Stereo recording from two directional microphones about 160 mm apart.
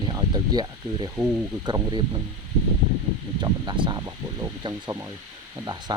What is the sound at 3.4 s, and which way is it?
Speech, 30° right (ahead or behind).